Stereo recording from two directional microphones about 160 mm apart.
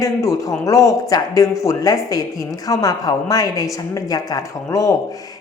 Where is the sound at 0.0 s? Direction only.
20° left (ahead or behind).